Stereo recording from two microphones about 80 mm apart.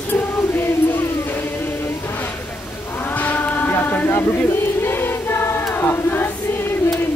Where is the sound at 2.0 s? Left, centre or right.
Left.